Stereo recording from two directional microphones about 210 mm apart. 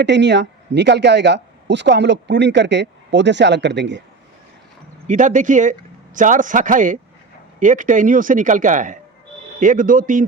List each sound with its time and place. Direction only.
0.0 s speech: 55° right (ahead or behind)
5.0 s speech: 35° right (ahead or behind)